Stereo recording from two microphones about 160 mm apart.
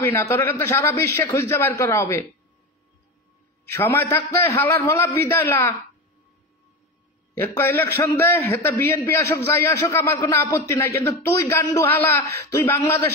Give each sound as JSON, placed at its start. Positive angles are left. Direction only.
{"t": 0.0, "sound": "a man's voice", "side_deg": 15}
{"t": 3.7, "sound": "a man's voice", "side_deg": 15}
{"t": 7.3, "sound": "a man's voice", "side_deg": 15}